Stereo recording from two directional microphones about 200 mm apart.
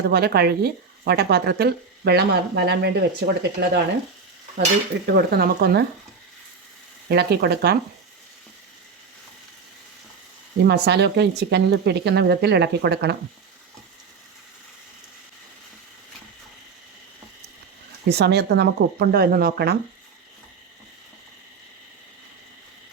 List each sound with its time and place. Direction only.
0.0 s speech: 50° right (ahead or behind)
4.5 s speech: 45° right (ahead or behind)
7.1 s speech: 55° right (ahead or behind)
10.7 s speech: 55° right (ahead or behind)
18.1 s speech: 55° right (ahead or behind)